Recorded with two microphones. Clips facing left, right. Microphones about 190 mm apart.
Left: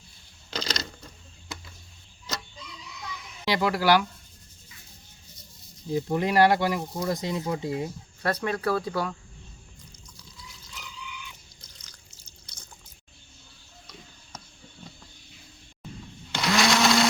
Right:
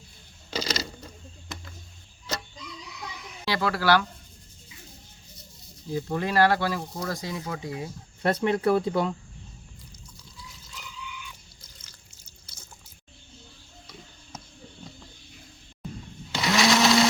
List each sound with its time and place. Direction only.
0.5 s crushing: 5° right (ahead or behind)
3.4 s speech: 15° left (ahead or behind)
5.9 s speech: 15° left (ahead or behind)
8.2 s speech: 20° right (ahead or behind)
16.3 s blender: centre (ahead or behind)